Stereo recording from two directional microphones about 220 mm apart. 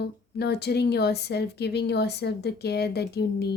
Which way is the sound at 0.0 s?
50° left (ahead or behind).